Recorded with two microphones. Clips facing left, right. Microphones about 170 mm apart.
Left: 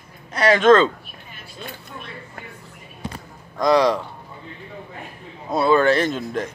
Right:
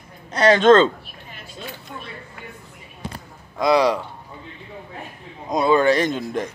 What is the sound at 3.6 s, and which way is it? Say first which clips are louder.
Speech: even; 10° right (ahead or behind).